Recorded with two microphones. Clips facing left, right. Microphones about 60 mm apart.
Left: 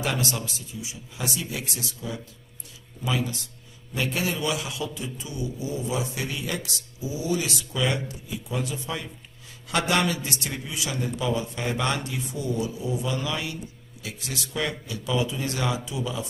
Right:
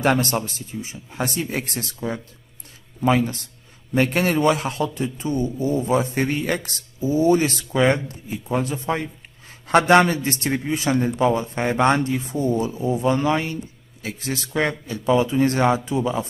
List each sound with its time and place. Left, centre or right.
0.0 s a man's voice: right